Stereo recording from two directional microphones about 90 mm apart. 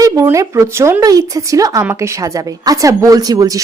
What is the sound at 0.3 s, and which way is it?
A woman's voice, 30° right (ahead or behind).